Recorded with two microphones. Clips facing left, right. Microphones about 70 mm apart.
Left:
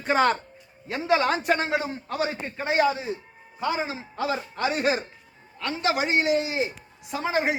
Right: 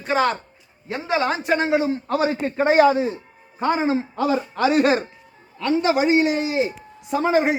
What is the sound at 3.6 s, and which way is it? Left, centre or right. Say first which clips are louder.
Speech: right 7 dB; right.